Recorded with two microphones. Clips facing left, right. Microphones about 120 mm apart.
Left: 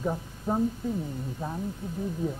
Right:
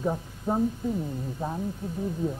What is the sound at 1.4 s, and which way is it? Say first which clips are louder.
Speech: right 3 dB; 25° right (ahead or behind).